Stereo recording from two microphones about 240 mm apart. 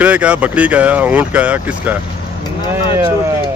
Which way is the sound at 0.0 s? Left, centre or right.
Centre.